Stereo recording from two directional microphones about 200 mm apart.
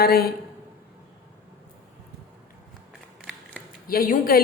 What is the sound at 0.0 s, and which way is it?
Speech, 50° left (ahead or behind).